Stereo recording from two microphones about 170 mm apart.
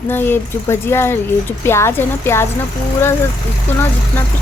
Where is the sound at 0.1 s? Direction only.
10° left (ahead or behind).